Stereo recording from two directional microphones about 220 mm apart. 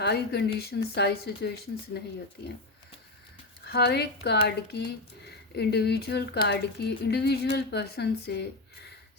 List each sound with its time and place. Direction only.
0.0 s speech: 50° left (ahead or behind)
3.7 s speech: 50° left (ahead or behind)